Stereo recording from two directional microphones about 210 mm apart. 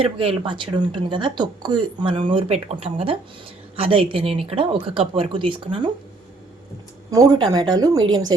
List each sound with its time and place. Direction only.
0.0 s speech: 25° right (ahead or behind)
7.1 s speech: 15° right (ahead or behind)